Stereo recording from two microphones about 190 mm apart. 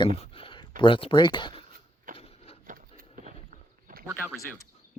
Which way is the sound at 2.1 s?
45° right (ahead or behind).